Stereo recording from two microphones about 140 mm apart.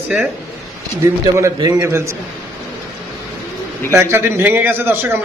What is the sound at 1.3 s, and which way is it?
Speech, 20° right (ahead or behind).